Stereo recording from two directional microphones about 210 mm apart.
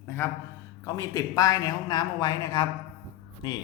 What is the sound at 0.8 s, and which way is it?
A man's voice, 15° left (ahead or behind).